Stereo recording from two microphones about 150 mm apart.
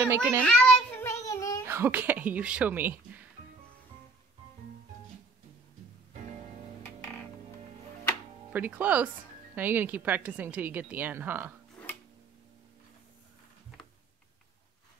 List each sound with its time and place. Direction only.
0.0 s speech: 15° right (ahead or behind)
0.4 s child singing: 10° left (ahead or behind)
1.0 s child singing: 20° left (ahead or behind)
1.7 s speech: 15° right (ahead or behind)
8.5 s speech: 10° right (ahead or behind)
11.8 s a sound: 10° left (ahead or behind)